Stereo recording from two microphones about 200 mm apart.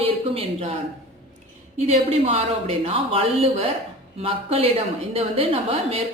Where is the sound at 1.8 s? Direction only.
30° right (ahead or behind).